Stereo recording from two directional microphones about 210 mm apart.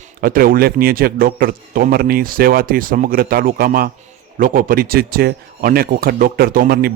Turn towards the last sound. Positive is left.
turn(degrees=-45)  # may be behind; listen again after turning